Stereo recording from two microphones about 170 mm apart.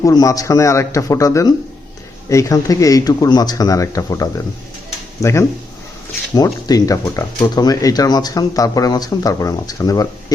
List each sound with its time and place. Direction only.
0.0 s speech: 20° left (ahead or behind)